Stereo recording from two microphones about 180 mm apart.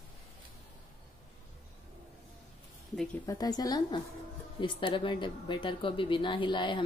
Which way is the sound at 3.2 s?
20° left (ahead or behind).